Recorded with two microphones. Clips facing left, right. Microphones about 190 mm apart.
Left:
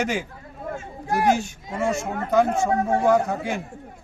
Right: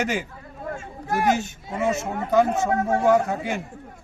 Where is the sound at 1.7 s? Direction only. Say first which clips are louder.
Even; 5° right (ahead or behind).